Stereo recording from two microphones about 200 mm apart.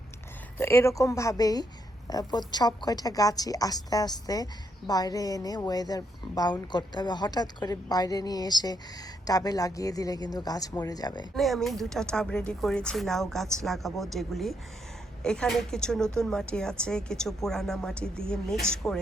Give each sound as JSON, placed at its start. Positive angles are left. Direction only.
{"t": 0.6, "sound": "a woman's voice", "side_deg": 10}
{"t": 11.3, "sound": "speech", "side_deg": 0}